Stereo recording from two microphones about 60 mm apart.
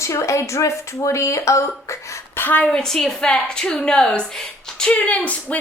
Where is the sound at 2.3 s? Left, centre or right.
Left.